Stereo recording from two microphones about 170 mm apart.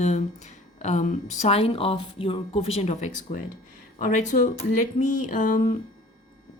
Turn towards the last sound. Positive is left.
turn(degrees=55)  # may be behind; listen again after turning